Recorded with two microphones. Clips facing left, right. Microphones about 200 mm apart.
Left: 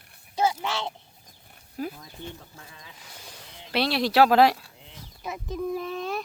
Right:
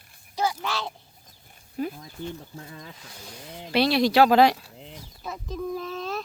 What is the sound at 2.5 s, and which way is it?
Speech, 45° right (ahead or behind).